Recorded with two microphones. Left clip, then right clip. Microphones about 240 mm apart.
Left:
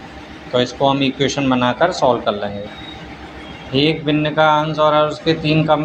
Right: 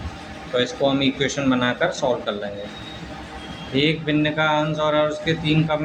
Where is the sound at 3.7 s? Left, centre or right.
Centre.